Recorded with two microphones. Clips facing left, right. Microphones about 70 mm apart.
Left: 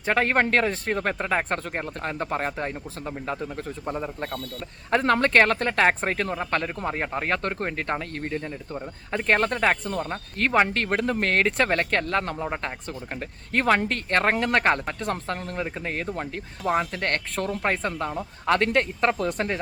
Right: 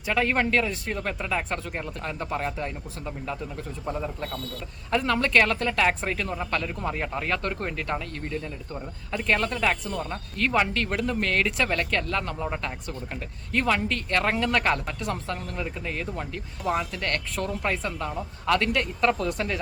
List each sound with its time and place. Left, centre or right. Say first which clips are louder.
0.0 s speech: left 2 dB; left
3.8 s a man's voice: even; left
4.9 s speech: left 3 dB; left